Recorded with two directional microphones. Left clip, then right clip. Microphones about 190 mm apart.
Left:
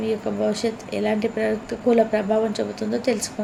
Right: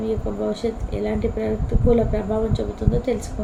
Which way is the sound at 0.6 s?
35° left (ahead or behind).